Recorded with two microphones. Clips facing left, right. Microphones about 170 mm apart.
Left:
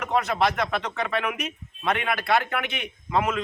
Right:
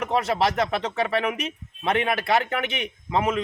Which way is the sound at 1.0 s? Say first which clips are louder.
Right 4 dB; 35° right (ahead or behind).